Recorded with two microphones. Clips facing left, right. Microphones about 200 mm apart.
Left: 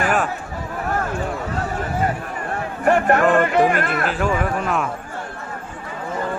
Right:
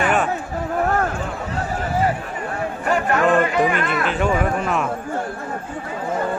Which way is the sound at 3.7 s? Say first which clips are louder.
Even; 50° left (ahead or behind).